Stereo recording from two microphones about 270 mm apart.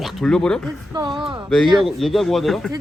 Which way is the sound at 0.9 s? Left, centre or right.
Centre.